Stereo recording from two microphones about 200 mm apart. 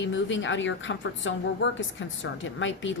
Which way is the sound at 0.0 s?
70° left (ahead or behind).